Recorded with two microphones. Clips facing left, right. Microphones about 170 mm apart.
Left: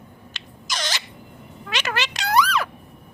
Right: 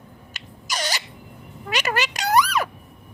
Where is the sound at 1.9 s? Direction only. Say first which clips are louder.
Right 2 dB; 40° right (ahead or behind).